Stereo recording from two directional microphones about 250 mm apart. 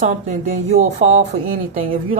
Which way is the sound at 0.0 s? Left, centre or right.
Right.